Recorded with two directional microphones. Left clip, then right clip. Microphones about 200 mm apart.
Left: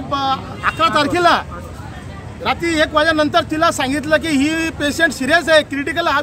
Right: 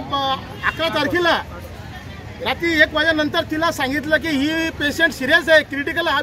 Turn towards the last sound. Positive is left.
turn(degrees=15)  # may be behind; listen again after turning